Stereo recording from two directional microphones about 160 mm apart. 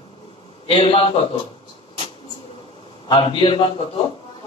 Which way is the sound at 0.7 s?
35° left (ahead or behind).